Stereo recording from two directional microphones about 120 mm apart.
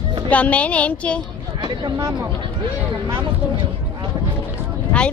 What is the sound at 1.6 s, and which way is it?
Speech, 35° right (ahead or behind).